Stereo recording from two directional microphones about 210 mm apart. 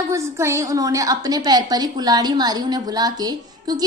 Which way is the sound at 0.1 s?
15° right (ahead or behind).